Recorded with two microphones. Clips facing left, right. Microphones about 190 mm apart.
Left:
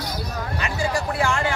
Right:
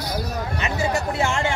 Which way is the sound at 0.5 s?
25° right (ahead or behind).